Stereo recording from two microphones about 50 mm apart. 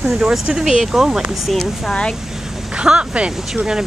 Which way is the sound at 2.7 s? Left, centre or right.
Right.